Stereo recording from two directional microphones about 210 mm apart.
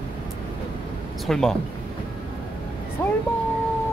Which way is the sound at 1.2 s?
Centre (ahead or behind).